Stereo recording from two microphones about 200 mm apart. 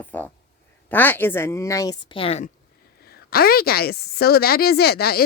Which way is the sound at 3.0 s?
50° left (ahead or behind).